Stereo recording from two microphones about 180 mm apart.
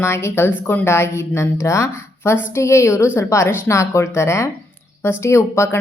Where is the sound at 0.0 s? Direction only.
15° left (ahead or behind).